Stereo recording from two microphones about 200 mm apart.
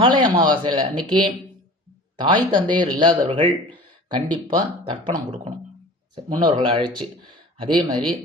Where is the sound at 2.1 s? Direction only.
25° right (ahead or behind).